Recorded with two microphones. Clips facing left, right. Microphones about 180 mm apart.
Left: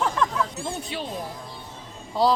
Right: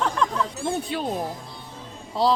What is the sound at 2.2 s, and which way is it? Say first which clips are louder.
Speech: even; centre (ahead or behind).